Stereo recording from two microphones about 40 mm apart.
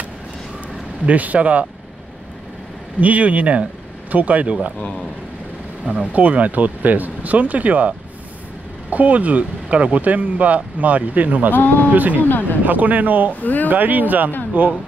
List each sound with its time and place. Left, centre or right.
1.0 s speech: right
3.0 s speech: right
5.9 s speech: right
8.9 s speech: right
11.5 s speech: left
11.9 s speech: right
12.2 s speech: left
12.6 s speech: right
13.3 s speech: left
13.7 s speech: right